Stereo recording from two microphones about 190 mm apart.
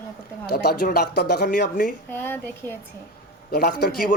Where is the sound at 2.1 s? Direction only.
10° left (ahead or behind).